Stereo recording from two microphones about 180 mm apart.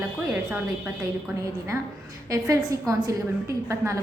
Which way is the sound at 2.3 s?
20° right (ahead or behind).